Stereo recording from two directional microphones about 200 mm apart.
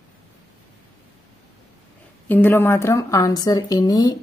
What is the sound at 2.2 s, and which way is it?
A woman's voice, 10° left (ahead or behind).